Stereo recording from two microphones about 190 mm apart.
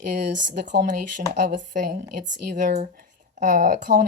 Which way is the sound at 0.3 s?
70° right (ahead or behind).